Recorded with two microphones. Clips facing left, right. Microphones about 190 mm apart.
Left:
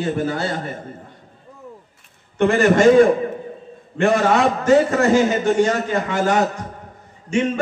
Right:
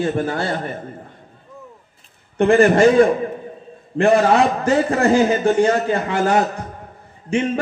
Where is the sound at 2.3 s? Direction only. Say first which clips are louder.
Right 2 dB; 35° right (ahead or behind).